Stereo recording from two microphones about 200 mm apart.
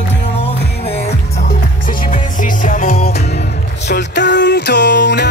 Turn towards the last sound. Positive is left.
turn(degrees=60)  # may be behind; listen again after turning